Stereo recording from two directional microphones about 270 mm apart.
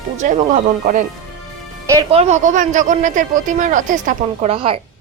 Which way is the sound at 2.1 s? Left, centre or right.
Right.